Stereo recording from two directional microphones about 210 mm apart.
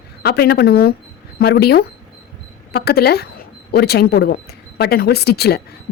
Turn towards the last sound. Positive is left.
turn(degrees=50)  # may be behind; listen again after turning